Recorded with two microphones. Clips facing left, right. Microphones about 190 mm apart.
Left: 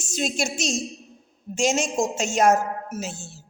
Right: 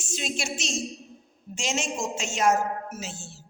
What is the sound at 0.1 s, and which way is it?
Speech, 40° left (ahead or behind).